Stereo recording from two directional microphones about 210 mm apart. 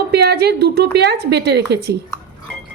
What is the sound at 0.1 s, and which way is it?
A woman's voice, 50° right (ahead or behind).